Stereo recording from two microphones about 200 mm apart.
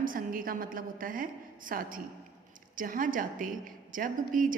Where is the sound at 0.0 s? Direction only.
45° right (ahead or behind).